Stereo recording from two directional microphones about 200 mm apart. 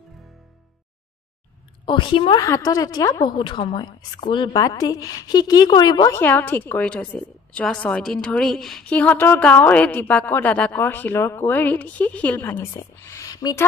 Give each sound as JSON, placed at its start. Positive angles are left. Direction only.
{"t": 1.9, "sound": "a woman's voice", "side_deg": 25}